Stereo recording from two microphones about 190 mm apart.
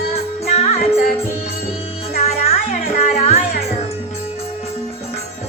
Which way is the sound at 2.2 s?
30° left (ahead or behind).